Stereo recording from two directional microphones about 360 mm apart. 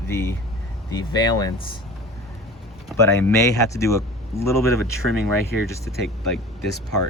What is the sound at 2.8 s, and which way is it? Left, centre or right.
Speech, centre.